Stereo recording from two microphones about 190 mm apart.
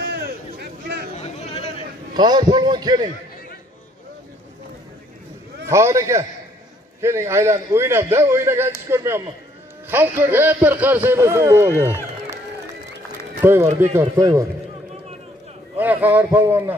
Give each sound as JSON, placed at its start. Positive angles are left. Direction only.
{"t": 0.0, "sound": "a sound", "side_deg": -60}
{"t": 1.1, "sound": "a sound", "side_deg": 35}
{"t": 2.1, "sound": "a man's voice", "side_deg": -20}
{"t": 5.7, "sound": "a man's voice", "side_deg": -15}
{"t": 13.4, "sound": "a man's voice", "side_deg": -15}
{"t": 15.8, "sound": "a man's voice", "side_deg": -10}